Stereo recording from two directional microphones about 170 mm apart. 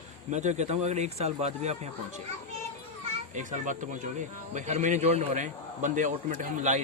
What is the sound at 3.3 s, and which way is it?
Speech, 45° right (ahead or behind).